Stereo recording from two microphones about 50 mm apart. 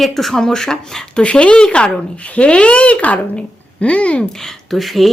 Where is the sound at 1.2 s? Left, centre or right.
Left.